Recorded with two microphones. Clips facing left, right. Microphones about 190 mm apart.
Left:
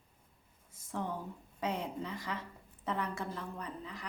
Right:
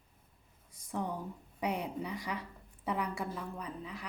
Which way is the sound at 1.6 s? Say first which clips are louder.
Right 1 dB; 15° right (ahead or behind).